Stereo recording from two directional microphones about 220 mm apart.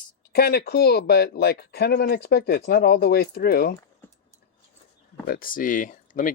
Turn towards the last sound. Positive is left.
turn(degrees=35)  # may be behind; listen again after turning